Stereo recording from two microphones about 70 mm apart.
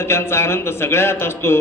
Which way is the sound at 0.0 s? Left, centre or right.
Left.